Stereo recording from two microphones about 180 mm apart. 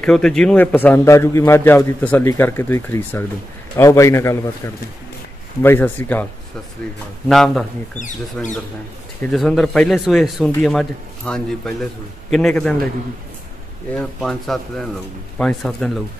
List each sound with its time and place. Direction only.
0.0 s a man's voice: 5° left (ahead or behind)
7.2 s speech: centre (ahead or behind)
13.9 s speech: centre (ahead or behind)